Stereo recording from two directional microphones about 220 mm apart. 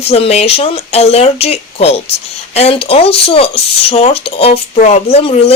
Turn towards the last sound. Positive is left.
turn(degrees=25)  # may be behind; listen again after turning